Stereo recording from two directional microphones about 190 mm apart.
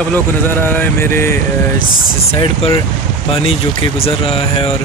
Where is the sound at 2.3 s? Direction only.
25° left (ahead or behind).